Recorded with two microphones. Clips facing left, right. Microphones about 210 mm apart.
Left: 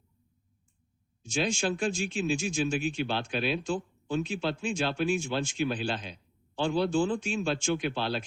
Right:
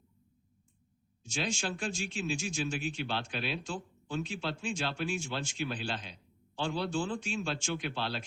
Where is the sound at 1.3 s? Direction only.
50° left (ahead or behind).